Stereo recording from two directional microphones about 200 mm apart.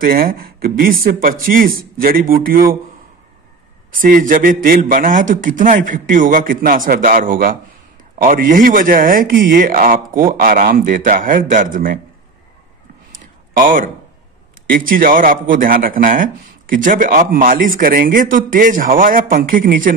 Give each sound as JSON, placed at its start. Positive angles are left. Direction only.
{"t": 0.0, "sound": "speech", "side_deg": -45}
{"t": 3.9, "sound": "speech", "side_deg": -45}
{"t": 13.5, "sound": "speech", "side_deg": -40}